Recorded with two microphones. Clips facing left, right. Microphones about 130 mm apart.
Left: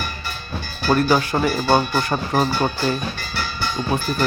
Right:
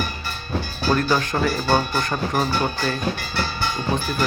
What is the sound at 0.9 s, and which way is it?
Speech, 10° left (ahead or behind).